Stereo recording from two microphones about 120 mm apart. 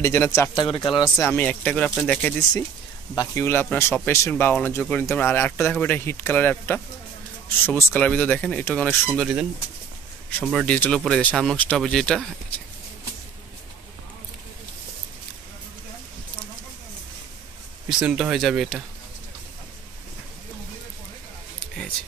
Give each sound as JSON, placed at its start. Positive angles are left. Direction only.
{"t": 0.0, "sound": "speech", "side_deg": 20}
{"t": 0.6, "sound": "speech", "side_deg": 45}
{"t": 1.1, "sound": "speech", "side_deg": 15}
{"t": 10.4, "sound": "speech", "side_deg": 5}
{"t": 17.8, "sound": "speech", "side_deg": -5}